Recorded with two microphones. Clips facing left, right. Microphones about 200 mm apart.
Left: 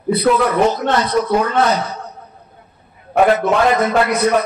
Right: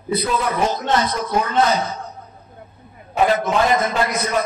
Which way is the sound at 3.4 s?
65° left (ahead or behind).